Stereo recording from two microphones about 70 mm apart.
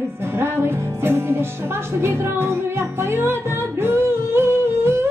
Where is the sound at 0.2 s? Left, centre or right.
Right.